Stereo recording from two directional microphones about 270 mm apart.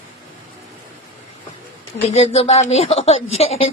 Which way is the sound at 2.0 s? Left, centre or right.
Left.